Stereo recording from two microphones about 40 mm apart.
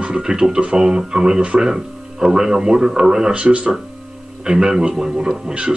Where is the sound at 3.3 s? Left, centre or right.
Right.